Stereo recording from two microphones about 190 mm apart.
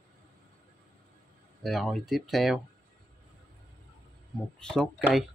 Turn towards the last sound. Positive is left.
turn(degrees=5)  # may be behind; listen again after turning